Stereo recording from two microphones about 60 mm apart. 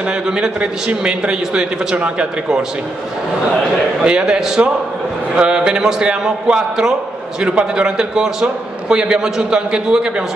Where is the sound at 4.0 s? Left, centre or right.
Centre.